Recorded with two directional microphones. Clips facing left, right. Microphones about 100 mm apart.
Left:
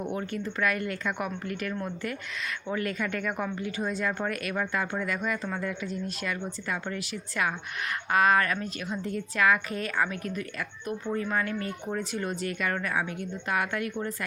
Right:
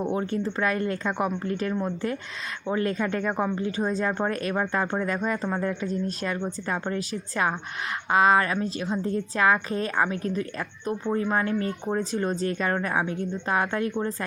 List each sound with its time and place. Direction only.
0.0 s a woman's voice: 25° right (ahead or behind)